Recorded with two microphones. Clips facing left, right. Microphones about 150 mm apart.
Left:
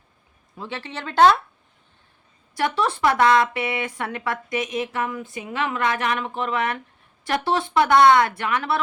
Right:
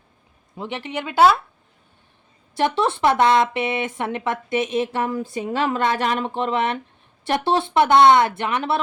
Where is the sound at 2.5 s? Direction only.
25° right (ahead or behind).